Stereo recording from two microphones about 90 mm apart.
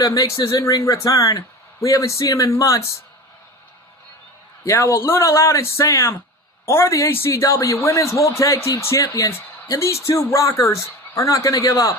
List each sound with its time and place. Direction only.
0.0 s a man's voice: 40° left (ahead or behind)
4.6 s a man's voice: 30° left (ahead or behind)